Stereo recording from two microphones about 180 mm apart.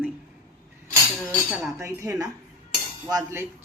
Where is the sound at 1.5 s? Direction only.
10° right (ahead or behind).